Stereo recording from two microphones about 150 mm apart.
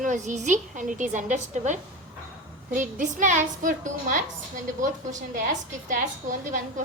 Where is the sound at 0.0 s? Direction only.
55° right (ahead or behind).